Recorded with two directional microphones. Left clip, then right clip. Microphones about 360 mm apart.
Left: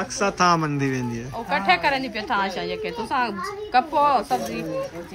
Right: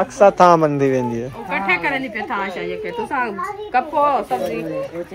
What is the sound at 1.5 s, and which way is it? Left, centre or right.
A child's voice, left.